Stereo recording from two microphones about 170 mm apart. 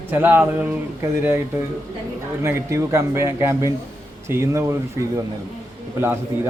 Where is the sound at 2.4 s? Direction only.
15° right (ahead or behind).